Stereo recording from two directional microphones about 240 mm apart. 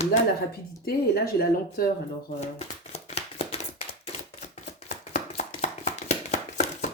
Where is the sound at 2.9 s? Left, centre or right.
Left.